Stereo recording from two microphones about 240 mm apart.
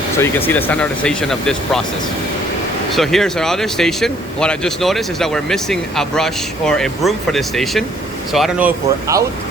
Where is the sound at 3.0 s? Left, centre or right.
Centre.